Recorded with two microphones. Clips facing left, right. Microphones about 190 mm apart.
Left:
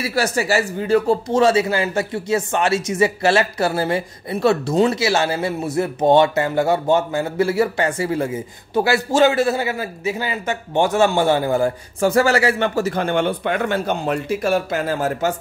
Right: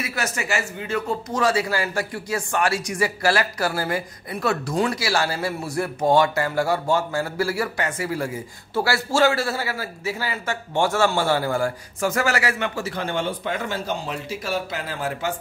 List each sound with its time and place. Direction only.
0.0 s a man's voice: 35° left (ahead or behind)